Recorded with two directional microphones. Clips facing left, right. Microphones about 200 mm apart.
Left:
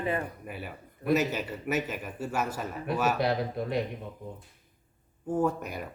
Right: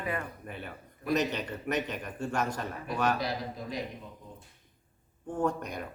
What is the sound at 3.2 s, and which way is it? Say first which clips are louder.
Speech: left 6 dB; 60° left (ahead or behind).